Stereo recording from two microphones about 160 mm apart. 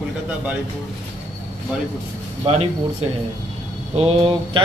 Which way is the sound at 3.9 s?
40° right (ahead or behind).